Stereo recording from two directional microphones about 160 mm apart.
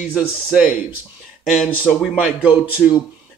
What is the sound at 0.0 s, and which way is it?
Speech, 5° right (ahead or behind).